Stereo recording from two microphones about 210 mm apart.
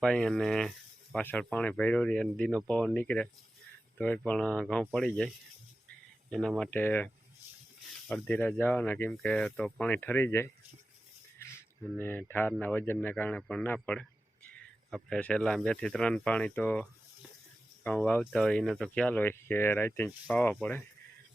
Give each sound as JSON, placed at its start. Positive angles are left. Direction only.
{"t": 0.0, "sound": "speech", "side_deg": 5}
{"t": 6.3, "sound": "speech", "side_deg": 0}
{"t": 17.8, "sound": "speech", "side_deg": 5}